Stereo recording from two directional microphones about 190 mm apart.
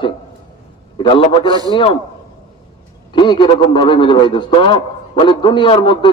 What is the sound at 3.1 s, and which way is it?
A man's voice, 25° left (ahead or behind).